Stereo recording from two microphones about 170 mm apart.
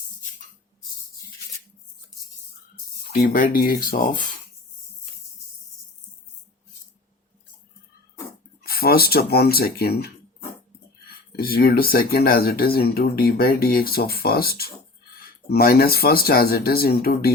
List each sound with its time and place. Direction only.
3.1 s speech: 60° left (ahead or behind)
8.6 s speech: 65° left (ahead or behind)
11.3 s speech: 60° left (ahead or behind)